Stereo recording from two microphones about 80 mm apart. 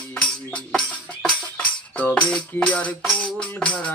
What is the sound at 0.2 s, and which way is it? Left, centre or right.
Music, centre.